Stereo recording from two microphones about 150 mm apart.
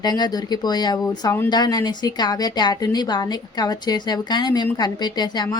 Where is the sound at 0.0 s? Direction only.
25° left (ahead or behind).